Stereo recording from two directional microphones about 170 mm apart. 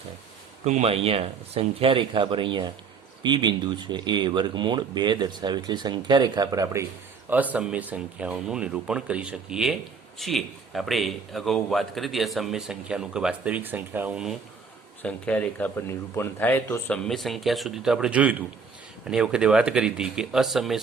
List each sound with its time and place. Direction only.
0.6 s speech: 40° right (ahead or behind); by 6.8 s 20° right (ahead or behind)
7.3 s a man's voice: 10° right (ahead or behind)
15.0 s a man's voice: 10° left (ahead or behind)